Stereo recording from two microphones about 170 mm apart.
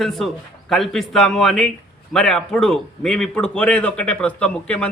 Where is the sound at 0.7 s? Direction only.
Centre (ahead or behind).